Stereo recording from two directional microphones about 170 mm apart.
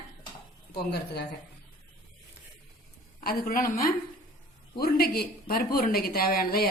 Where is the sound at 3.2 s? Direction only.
60° left (ahead or behind).